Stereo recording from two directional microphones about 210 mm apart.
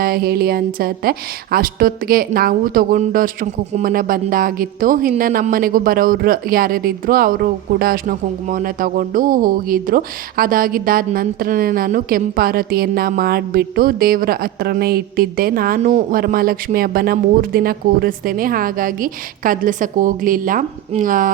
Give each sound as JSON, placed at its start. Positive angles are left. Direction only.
{"t": 0.0, "sound": "speech", "side_deg": -45}